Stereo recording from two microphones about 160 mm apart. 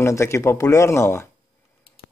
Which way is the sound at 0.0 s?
15° left (ahead or behind).